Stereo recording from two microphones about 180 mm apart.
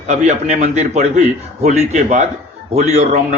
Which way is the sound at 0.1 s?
40° right (ahead or behind).